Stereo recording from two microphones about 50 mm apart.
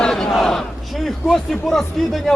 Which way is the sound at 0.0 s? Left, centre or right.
Centre.